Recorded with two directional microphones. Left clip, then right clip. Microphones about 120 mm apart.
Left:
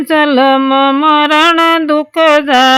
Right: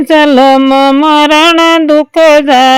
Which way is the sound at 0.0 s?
25° right (ahead or behind).